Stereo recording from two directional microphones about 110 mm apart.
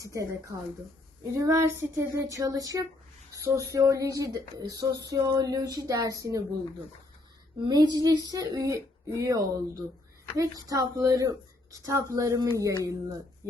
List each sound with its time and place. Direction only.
0.0 s speech: 30° right (ahead or behind)
7.7 s speech: 35° right (ahead or behind)